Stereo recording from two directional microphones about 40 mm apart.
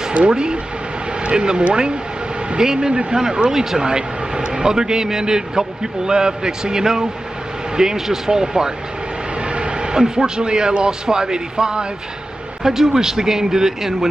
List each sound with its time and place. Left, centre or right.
0.3 s a man's voice: right
9.5 s a sound: right
9.9 s a man's voice: centre